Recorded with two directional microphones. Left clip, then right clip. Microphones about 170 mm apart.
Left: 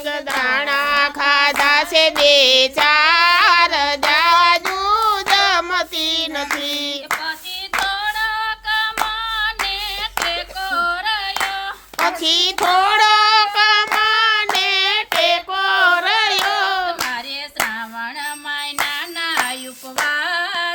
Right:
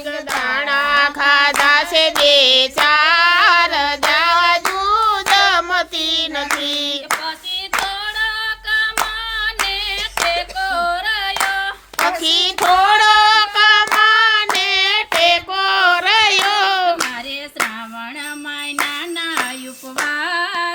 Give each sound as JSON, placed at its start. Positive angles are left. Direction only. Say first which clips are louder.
{"t": 0.4, "sound": "music", "louder": "right 1 dB", "side_deg": 10}
{"t": 5.3, "sound": "child singing", "louder": "right 3 dB", "side_deg": 10}
{"t": 8.4, "sound": "hands", "louder": "right 2 dB", "side_deg": -20}
{"t": 10.0, "sound": "singing", "louder": "right 4 dB", "side_deg": -20}
{"t": 12.0, "sound": "child singing", "louder": "right 1 dB", "side_deg": 10}
{"t": 20.1, "sound": "a sound", "louder": "even", "side_deg": 65}